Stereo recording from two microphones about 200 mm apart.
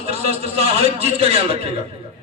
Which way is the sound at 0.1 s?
30° right (ahead or behind).